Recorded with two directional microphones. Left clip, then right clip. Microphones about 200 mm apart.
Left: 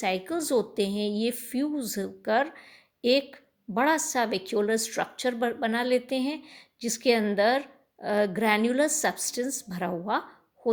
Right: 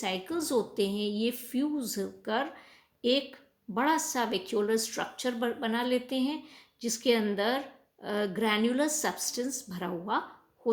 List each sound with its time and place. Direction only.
0.0 s a woman's voice: 35° left (ahead or behind)